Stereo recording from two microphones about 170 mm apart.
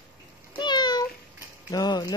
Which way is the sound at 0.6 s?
25° left (ahead or behind).